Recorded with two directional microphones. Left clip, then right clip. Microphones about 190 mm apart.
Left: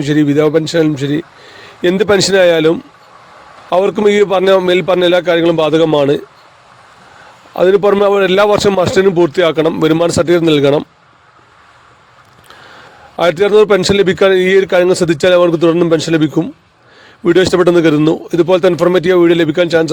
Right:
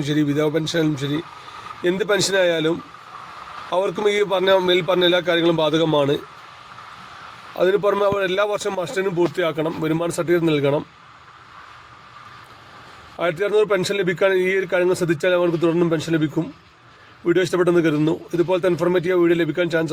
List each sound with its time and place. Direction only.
0.0 s a man's voice: 45° left (ahead or behind)
7.5 s a man's voice: 50° left (ahead or behind)
13.1 s a man's voice: 55° left (ahead or behind)